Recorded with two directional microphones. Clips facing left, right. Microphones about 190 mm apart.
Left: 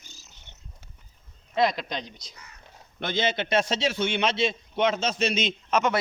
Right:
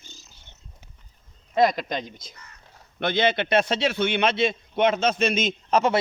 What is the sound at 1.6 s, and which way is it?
Speech, 50° right (ahead or behind).